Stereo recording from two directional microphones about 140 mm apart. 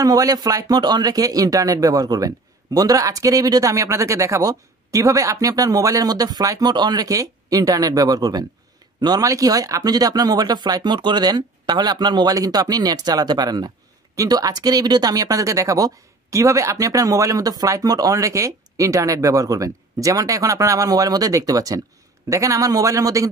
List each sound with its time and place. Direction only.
0.0 s speech: 25° right (ahead or behind)